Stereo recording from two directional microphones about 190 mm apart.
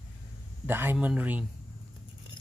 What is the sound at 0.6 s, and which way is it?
Speech, 10° right (ahead or behind).